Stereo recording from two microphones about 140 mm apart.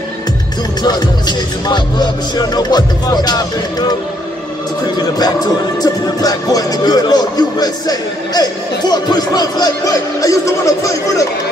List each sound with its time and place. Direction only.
0.8 s speech: 30° left (ahead or behind)
5.2 s speech: 25° left (ahead or behind)